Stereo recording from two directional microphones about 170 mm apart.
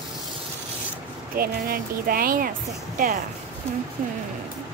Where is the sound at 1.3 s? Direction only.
60° right (ahead or behind).